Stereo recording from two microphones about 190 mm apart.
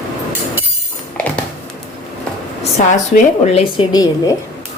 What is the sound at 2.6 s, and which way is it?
Speech, 40° left (ahead or behind).